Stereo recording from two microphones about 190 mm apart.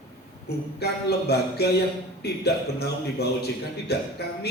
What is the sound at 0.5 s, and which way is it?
A man's voice, 60° left (ahead or behind).